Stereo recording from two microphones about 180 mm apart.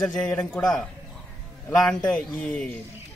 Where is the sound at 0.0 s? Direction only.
5° left (ahead or behind).